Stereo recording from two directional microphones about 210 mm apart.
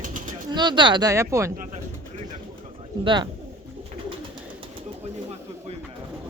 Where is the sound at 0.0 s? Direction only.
40° right (ahead or behind).